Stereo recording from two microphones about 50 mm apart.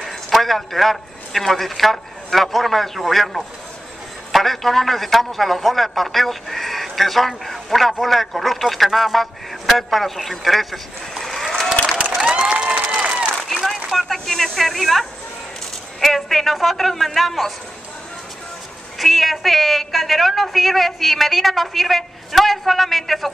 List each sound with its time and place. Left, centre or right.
0.0 s a man's voice: centre
12.2 s applause: right
13.4 s a sound: centre
13.8 s a woman's voice: centre
18.9 s a woman's voice: centre